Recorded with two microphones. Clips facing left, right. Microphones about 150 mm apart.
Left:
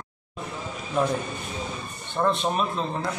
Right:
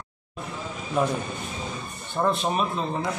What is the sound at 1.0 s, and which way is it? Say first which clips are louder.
Speech: even; 5° right (ahead or behind).